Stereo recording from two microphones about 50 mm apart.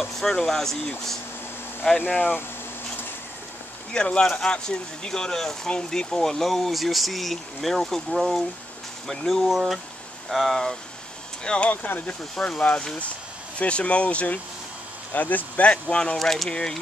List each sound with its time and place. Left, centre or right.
0.0 s speech: centre
2.0 s speech: left
3.9 s speech: centre
11.4 s speech: centre
11.7 s speech: left
12.4 s speech: left
16.2 s speech: centre
16.4 s speech: centre